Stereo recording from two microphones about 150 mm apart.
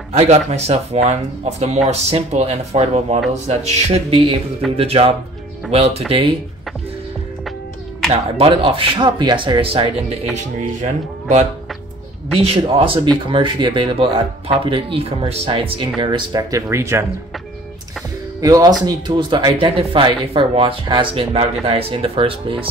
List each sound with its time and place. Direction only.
0.1 s speech: 45° right (ahead or behind)
8.1 s speech: 40° right (ahead or behind)
10.3 s speech: 50° right (ahead or behind)
12.4 s speech: 40° right (ahead or behind); by 17.0 s 15° right (ahead or behind)
18.4 s speech: 25° right (ahead or behind)